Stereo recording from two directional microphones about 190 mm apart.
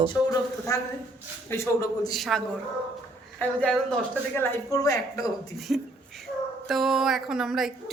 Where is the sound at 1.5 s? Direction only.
15° left (ahead or behind).